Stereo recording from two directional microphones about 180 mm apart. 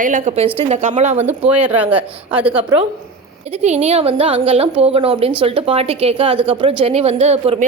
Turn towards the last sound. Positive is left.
turn(degrees=-35)  # may be behind; listen again after turning